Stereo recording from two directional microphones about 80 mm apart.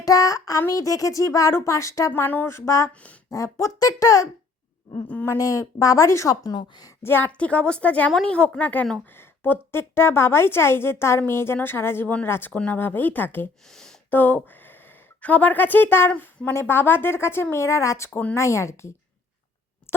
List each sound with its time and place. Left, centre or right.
0.0 s child singing: left
0.7 s a woman's voice: left
2.2 s speech: left
2.5 s a woman's voice: left
2.9 s speech: centre
3.2 s a woman's voice: left
5.4 s speech: left
6.4 s a woman's voice: left
7.0 s speech: left
7.3 s a woman's voice: centre
13.7 s a sound: centre
14.1 s a woman's voice: left